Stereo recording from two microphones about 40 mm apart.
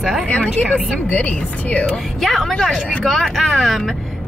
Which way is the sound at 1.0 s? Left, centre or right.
Left.